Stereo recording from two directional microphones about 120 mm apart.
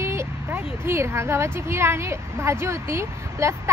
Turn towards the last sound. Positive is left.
turn(degrees=-25)  # may be behind; listen again after turning